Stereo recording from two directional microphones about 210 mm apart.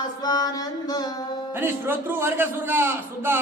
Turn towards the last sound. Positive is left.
turn(degrees=-10)  # may be behind; listen again after turning